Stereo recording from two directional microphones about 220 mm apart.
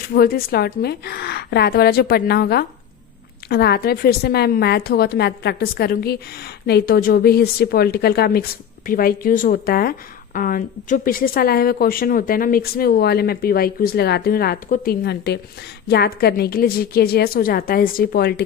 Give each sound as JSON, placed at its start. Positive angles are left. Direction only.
{"t": 0.1, "sound": "speech", "side_deg": 40}